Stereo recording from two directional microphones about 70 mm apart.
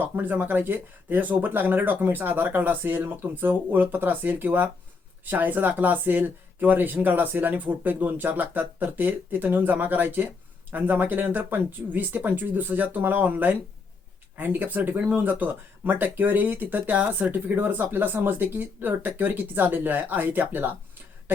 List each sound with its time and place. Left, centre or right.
0.0 s speech: right